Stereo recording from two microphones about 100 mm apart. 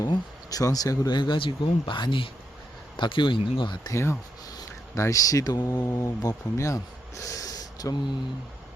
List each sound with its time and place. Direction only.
0.1 s speech: 35° left (ahead or behind); by 3.8 s 55° left (ahead or behind)
3.8 s speech: 25° left (ahead or behind); by 5.8 s 45° left (ahead or behind)
5.8 s speech: 30° left (ahead or behind)